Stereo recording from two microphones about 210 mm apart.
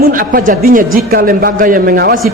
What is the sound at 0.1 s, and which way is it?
A woman's voice, 40° right (ahead or behind).